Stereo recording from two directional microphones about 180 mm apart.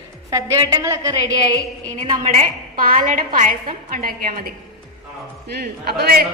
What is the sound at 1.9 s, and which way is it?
A woman's voice, 45° right (ahead or behind).